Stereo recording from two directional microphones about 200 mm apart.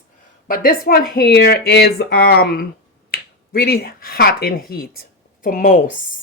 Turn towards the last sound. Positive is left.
turn(degrees=40)  # may be behind; listen again after turning